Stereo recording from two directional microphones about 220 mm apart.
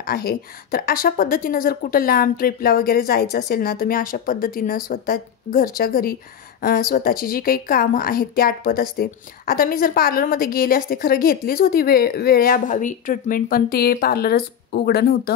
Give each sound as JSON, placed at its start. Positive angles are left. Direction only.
{"t": 0.0, "sound": "a woman's voice", "side_deg": 45}